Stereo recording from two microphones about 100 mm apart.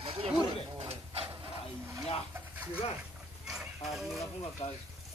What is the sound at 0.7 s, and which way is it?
Printer, 85° right.